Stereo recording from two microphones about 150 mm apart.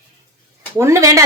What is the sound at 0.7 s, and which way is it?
Speech, 20° right (ahead or behind).